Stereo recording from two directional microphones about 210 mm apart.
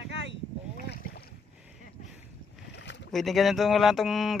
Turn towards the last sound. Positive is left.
turn(degrees=0)  # may be behind; listen again after turning